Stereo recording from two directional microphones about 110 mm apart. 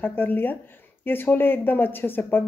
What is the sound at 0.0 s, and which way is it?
A woman's voice, 20° left (ahead or behind).